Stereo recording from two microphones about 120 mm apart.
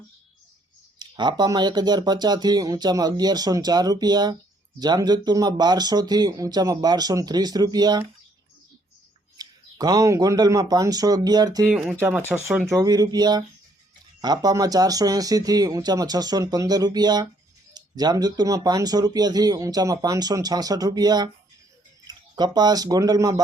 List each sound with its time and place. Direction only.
0.9 s speech: 35° right (ahead or behind)
9.4 s speech: 30° right (ahead or behind)
11.7 s speech: 5° right (ahead or behind); by 23.3 s 30° right (ahead or behind)